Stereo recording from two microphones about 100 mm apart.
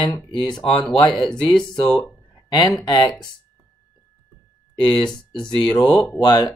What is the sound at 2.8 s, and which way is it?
Speech, 45° left (ahead or behind).